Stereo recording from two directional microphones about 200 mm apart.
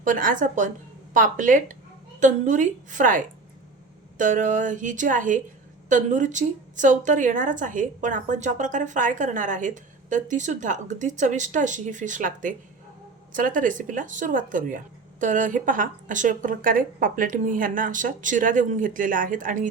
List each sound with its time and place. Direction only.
0.0 s a woman's voice: 40° right (ahead or behind)